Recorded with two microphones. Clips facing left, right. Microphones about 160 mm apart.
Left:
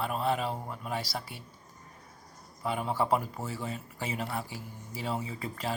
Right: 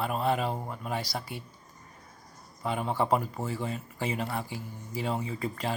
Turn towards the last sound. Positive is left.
turn(degrees=5)  # may be behind; listen again after turning